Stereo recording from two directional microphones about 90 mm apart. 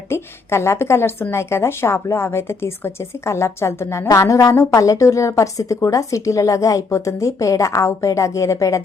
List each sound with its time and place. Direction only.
0.1 s a woman's voice: 30° left (ahead or behind)